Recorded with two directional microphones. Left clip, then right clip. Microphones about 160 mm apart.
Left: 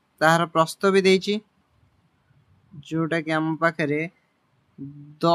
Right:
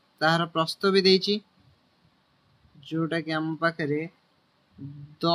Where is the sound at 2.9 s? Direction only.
35° left (ahead or behind).